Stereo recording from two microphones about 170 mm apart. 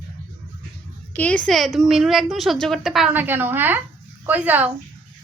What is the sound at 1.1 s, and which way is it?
A woman's voice, 10° left (ahead or behind).